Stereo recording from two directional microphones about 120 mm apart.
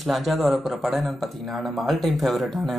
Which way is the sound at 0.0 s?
Centre (ahead or behind).